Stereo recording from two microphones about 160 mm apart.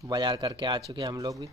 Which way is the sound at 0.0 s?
25° right (ahead or behind).